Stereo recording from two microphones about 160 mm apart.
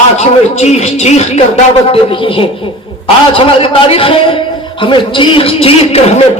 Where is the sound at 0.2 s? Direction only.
45° left (ahead or behind).